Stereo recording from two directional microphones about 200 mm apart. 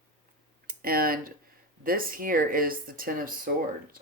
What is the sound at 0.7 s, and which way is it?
Speech, 45° right (ahead or behind).